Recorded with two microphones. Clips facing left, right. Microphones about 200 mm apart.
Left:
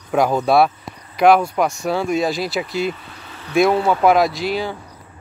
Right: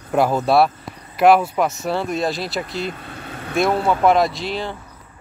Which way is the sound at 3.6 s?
Centre (ahead or behind).